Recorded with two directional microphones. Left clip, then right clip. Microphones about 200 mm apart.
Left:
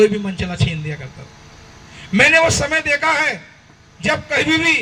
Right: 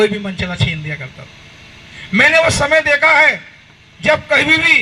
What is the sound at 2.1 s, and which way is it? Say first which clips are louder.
A man's voice: right 2 dB; 35° right (ahead or behind).